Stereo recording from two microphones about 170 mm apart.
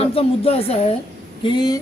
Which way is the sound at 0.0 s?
35° left (ahead or behind).